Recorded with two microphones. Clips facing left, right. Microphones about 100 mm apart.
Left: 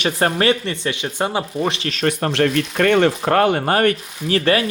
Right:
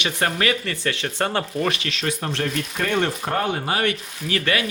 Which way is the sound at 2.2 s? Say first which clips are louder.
Left 8 dB; 80° left.